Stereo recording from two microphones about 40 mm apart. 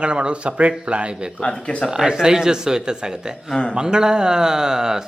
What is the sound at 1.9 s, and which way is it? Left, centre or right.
A man's voice, centre.